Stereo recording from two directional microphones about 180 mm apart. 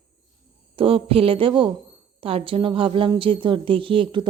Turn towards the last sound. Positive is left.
turn(degrees=-30)  # may be behind; listen again after turning